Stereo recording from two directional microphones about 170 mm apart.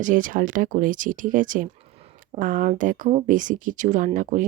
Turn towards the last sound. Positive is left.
turn(degrees=-50)  # may be behind; listen again after turning